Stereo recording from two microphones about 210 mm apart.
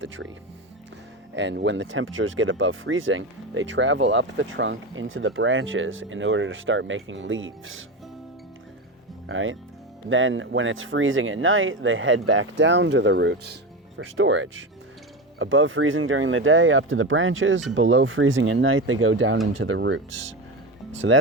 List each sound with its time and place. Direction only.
1.4 s speech: 55° right (ahead or behind)
9.3 s speech: 70° right (ahead or behind)